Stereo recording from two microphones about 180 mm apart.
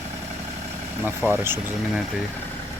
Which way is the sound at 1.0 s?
10° right (ahead or behind).